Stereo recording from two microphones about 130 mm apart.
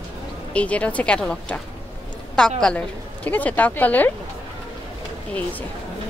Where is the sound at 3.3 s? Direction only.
15° left (ahead or behind).